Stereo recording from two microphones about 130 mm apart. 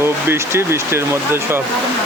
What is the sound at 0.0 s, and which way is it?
Speech, 20° right (ahead or behind).